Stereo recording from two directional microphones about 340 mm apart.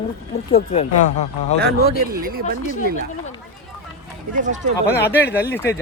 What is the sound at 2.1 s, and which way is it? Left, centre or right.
Speech, right.